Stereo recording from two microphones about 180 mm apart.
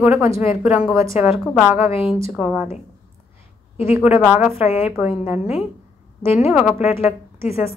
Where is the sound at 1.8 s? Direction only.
30° left (ahead or behind).